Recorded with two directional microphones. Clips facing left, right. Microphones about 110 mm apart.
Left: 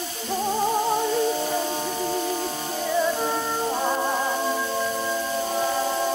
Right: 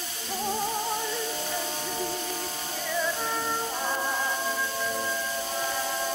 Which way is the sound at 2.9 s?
25° left (ahead or behind).